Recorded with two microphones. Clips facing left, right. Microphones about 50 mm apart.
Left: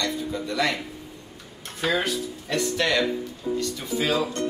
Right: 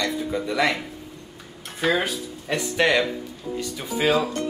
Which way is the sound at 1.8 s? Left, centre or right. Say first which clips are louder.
Right 2 dB; centre.